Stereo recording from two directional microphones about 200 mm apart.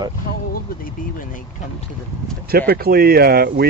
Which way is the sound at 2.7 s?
50° right (ahead or behind).